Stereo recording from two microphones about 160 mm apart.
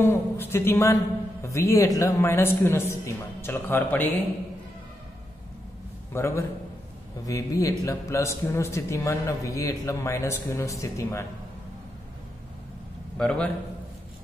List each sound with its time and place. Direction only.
0.0 s a man's voice: 15° left (ahead or behind)
6.1 s a man's voice: 15° left (ahead or behind)
13.2 s a man's voice: 5° left (ahead or behind)